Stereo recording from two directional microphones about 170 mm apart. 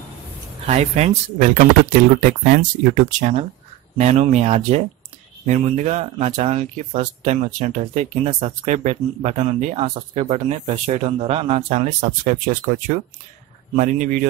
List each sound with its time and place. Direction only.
0.7 s speech: 40° right (ahead or behind)